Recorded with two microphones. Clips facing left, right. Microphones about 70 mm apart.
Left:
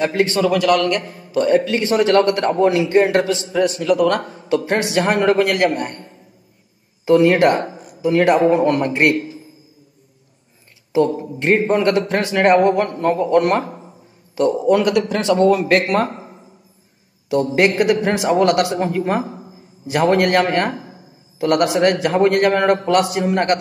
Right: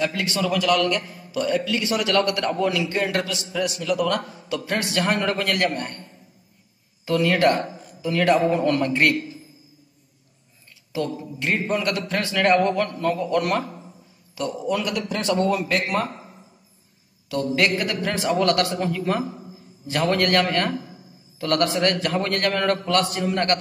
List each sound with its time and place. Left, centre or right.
0.0 s a man's voice: left
4.7 s a man's voice: left
7.1 s a man's voice: left
11.1 s a man's voice: left
15.3 s a man's voice: left
17.6 s a man's voice: left
18.9 s a man's voice: left
20.7 s a sound: left
21.4 s a man's voice: centre
23.1 s a man's voice: left